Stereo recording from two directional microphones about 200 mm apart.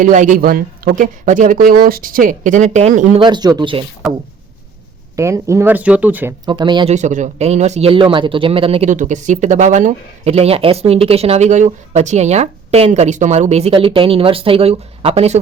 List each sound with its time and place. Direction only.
0.0 s speech: 40° right (ahead or behind)
3.2 s speech: 20° right (ahead or behind)
4.0 s speech: centre (ahead or behind)
5.1 s speech: 15° right (ahead or behind)
6.4 s speech: 20° right (ahead or behind)
6.9 s speech: 35° right (ahead or behind)